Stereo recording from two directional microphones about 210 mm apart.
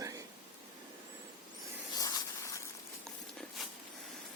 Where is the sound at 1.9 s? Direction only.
15° left (ahead or behind).